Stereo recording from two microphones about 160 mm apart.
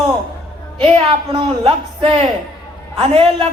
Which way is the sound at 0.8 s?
35° right (ahead or behind).